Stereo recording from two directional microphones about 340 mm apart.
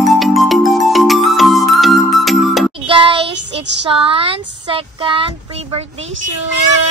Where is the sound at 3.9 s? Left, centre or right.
Centre.